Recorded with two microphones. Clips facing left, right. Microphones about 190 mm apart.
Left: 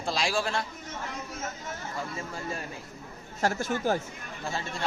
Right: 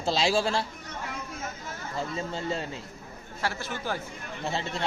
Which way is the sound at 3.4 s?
45° left (ahead or behind).